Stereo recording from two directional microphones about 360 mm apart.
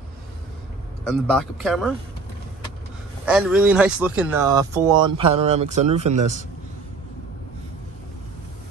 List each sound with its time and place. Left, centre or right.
1.0 s speech: centre
3.3 s speech: centre